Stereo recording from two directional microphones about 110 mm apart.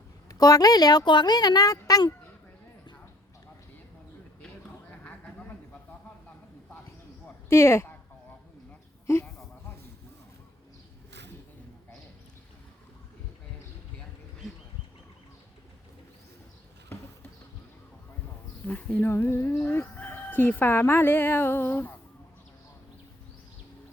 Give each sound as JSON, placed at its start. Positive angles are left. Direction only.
{"t": 0.3, "sound": "a woman's voice", "side_deg": 35}
{"t": 4.4, "sound": "a sound", "side_deg": 10}
{"t": 7.3, "sound": "a sound", "side_deg": 25}
{"t": 9.1, "sound": "speech", "side_deg": 25}
{"t": 16.9, "sound": "bee", "side_deg": 20}
{"t": 18.6, "sound": "speech", "side_deg": 10}